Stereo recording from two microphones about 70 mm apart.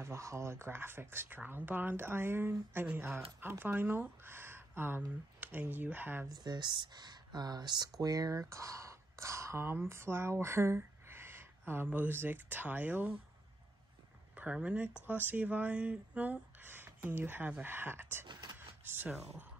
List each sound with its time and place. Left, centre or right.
0.0 s speech: right
6.4 s speech: right
8.0 s speech: right
14.3 s speech: right
18.2 s a sound: right